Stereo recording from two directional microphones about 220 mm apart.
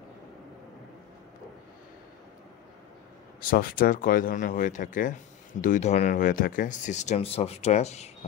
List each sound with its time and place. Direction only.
3.3 s speech: 40° left (ahead or behind)